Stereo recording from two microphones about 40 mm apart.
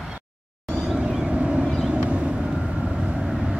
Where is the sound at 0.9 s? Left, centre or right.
Right.